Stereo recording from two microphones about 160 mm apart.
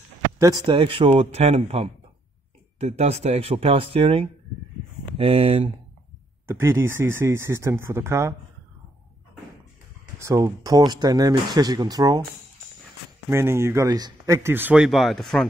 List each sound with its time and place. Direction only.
0.7 s speech: 35° right (ahead or behind)
6.4 s speech: 15° right (ahead or behind)
10.1 s speech: 20° right (ahead or behind)
13.3 s speech: 15° right (ahead or behind); by 15.4 s centre (ahead or behind)